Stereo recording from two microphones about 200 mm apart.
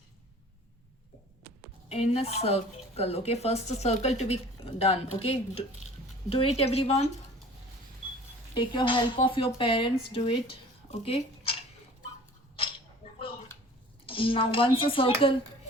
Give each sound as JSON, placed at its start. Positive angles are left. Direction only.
{"t": 1.9, "sound": "a woman's voice", "side_deg": 30}
{"t": 8.5, "sound": "speech", "side_deg": 25}
{"t": 13.1, "sound": "a sound", "side_deg": 25}
{"t": 14.1, "sound": "speech", "side_deg": 25}